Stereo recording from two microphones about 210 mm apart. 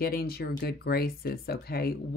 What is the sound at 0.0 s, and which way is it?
Speech, 45° left (ahead or behind).